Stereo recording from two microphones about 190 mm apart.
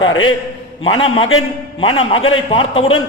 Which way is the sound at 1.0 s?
30° left (ahead or behind).